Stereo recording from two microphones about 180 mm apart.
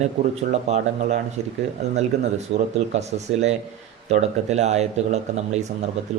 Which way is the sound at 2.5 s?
40° right (ahead or behind).